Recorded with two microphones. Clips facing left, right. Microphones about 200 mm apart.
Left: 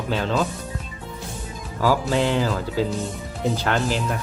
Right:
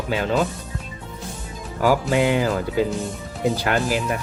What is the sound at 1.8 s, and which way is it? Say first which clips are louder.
Speech: right 2 dB; 15° right (ahead or behind).